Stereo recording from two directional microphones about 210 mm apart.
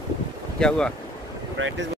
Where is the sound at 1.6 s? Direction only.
65° right (ahead or behind).